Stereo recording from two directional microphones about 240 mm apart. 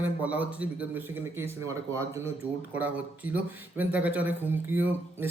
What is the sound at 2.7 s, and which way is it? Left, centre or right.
Speech, centre.